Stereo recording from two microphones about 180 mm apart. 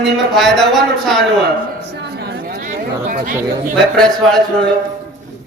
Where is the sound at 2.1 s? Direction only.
65° right (ahead or behind).